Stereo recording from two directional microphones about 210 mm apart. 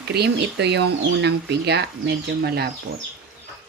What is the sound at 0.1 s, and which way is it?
Speech, 50° right (ahead or behind).